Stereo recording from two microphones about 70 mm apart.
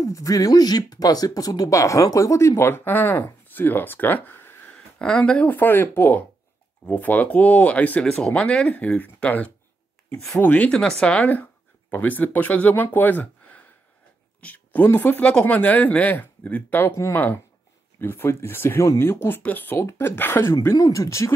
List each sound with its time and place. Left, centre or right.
0.0 s speech: left
4.6 s speech: centre
10.7 s speech: centre
11.9 s speech: left
20.7 s speech: left